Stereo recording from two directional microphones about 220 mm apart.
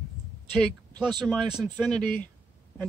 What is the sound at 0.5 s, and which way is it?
Speech, centre (ahead or behind).